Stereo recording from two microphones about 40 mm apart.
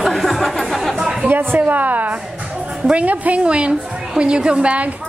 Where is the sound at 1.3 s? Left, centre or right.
Right.